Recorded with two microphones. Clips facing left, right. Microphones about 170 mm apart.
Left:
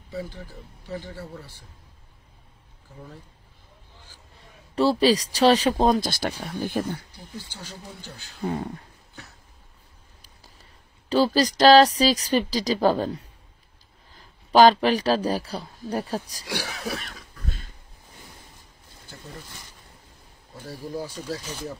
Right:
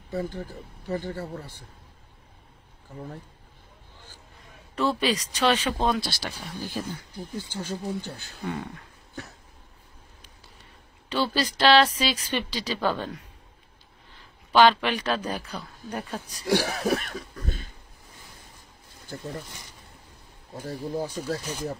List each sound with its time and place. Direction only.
0.1 s speech: 55° right (ahead or behind)
4.7 s speech: 35° left (ahead or behind); by 7.0 s 55° left (ahead or behind)
7.3 s speech: 50° right (ahead or behind)
8.5 s speech: 30° left (ahead or behind)
11.1 s speech: 40° left (ahead or behind)
16.4 s speech: 50° right (ahead or behind)
20.6 s speech: 50° right (ahead or behind)